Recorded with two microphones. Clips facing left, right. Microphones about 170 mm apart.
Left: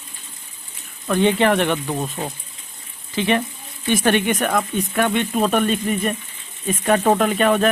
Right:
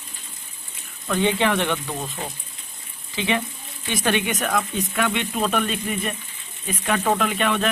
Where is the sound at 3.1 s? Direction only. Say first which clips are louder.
Left 4 dB; 55° left (ahead or behind).